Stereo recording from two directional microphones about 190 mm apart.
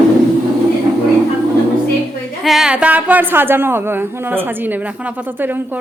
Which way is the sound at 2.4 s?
Centre (ahead or behind).